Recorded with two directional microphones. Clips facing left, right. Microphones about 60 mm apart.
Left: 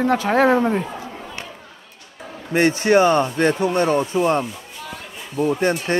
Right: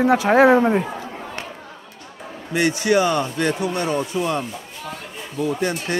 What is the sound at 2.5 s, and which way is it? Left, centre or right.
Speech, left.